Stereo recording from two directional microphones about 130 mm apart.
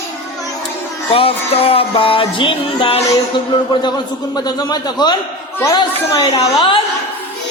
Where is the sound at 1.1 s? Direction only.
45° left (ahead or behind).